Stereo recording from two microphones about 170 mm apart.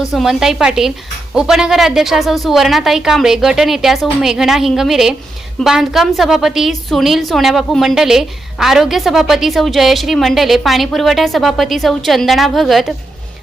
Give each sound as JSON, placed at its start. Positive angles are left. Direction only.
{"t": 0.0, "sound": "a woman's voice", "side_deg": 0}